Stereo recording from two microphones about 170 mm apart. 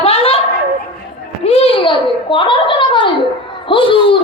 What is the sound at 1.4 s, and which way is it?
A woman's voice, 35° left (ahead or behind).